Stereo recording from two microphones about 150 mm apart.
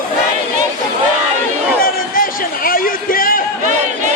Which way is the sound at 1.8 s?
70° left (ahead or behind).